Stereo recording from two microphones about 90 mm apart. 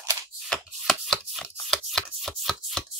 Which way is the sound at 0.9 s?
Centre (ahead or behind).